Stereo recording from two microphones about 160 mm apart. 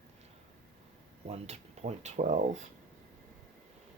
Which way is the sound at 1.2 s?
40° right (ahead or behind).